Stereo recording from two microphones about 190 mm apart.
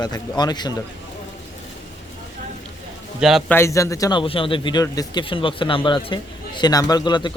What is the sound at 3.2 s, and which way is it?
Speech, centre (ahead or behind).